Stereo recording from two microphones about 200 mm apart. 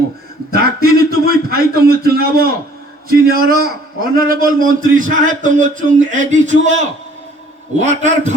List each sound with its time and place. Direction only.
0.5 s a man's voice: 50° right (ahead or behind)
7.8 s a man's voice: 35° right (ahead or behind)